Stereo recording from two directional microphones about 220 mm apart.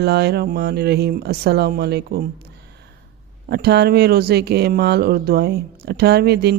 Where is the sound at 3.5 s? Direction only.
50° right (ahead or behind).